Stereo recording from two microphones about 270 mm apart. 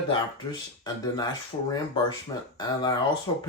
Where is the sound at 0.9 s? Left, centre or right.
Centre.